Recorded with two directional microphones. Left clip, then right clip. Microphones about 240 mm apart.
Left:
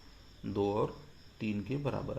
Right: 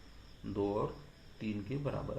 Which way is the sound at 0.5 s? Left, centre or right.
Left.